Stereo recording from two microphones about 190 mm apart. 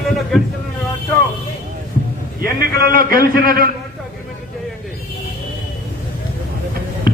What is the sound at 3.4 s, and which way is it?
Speech, 50° right (ahead or behind).